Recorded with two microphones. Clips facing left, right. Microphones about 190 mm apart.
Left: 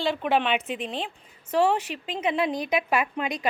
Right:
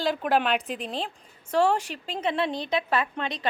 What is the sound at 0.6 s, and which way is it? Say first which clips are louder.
Speech: left 2 dB; 35° right (ahead or behind).